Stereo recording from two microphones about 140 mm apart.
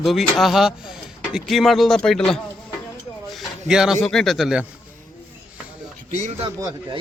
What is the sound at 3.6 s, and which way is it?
Speech, 5° right (ahead or behind).